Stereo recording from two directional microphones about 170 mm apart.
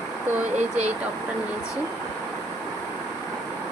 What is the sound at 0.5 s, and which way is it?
Speech, 40° right (ahead or behind).